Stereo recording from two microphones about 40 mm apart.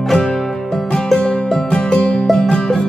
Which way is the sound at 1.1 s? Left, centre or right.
Left.